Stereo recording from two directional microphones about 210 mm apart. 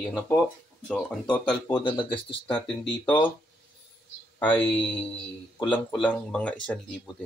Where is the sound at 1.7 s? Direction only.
25° left (ahead or behind).